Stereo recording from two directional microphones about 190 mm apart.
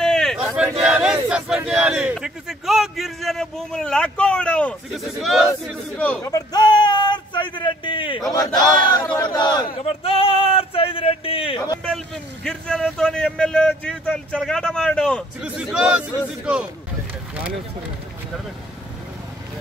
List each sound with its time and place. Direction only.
0.0 s a sound: 5° left (ahead or behind)
0.8 s speech: 5° right (ahead or behind)
5.9 s a man's voice: 10° left (ahead or behind); by 11.6 s 30° left (ahead or behind)
12.4 s speech: 5° left (ahead or behind)